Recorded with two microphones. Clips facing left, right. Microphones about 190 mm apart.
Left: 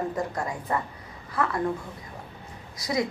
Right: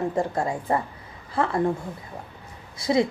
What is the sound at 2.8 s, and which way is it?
Speech, 30° right (ahead or behind).